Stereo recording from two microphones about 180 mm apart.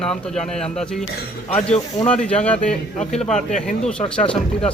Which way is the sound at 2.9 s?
40° left (ahead or behind).